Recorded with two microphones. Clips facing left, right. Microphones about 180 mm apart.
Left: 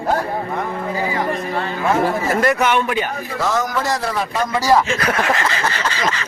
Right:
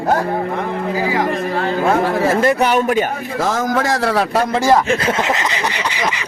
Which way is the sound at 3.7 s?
90° right.